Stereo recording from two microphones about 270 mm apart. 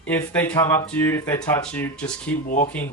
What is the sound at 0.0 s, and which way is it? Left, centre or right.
Speech, centre.